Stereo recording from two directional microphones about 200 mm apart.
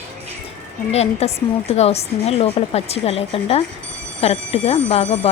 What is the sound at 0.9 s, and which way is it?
Speech, 30° left (ahead or behind).